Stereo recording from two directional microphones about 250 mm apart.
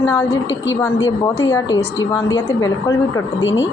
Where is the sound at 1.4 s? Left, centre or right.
Centre.